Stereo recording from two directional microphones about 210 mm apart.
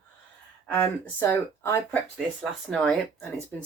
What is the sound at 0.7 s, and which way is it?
Speech, 10° left (ahead or behind).